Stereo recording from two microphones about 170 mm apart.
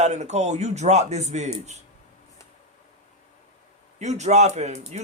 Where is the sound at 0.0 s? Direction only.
40° right (ahead or behind).